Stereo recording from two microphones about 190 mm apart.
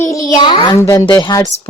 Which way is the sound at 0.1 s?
20° left (ahead or behind).